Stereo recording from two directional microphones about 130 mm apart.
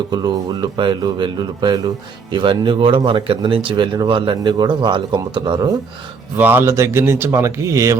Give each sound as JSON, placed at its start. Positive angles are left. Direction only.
{"t": 0.1, "sound": "speech", "side_deg": -30}
{"t": 6.3, "sound": "speech", "side_deg": -15}